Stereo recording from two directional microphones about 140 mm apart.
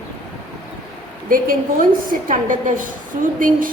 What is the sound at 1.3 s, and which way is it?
Speech, 85° right.